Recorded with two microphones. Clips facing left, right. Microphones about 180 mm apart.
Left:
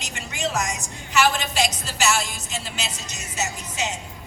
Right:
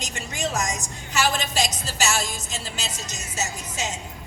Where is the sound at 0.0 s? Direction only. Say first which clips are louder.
Even; 40° right (ahead or behind).